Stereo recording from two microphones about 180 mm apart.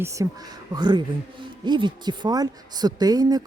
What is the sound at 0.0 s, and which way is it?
Speech, 15° right (ahead or behind).